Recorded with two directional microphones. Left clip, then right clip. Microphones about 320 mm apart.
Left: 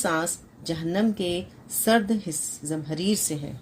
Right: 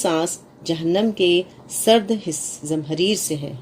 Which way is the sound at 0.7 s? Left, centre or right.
Left.